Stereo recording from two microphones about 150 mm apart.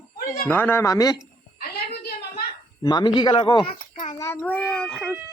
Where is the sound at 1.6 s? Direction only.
90° left.